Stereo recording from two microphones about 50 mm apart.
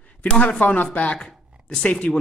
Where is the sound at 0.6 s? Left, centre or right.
Left.